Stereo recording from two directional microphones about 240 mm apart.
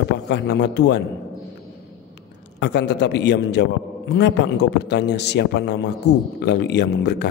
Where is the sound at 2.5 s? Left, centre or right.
Left.